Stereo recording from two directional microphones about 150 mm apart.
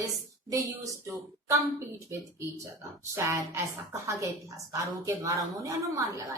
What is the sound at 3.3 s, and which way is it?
Speech, 20° right (ahead or behind).